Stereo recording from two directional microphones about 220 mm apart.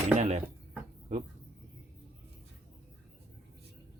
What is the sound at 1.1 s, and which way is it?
Speech, 30° right (ahead or behind).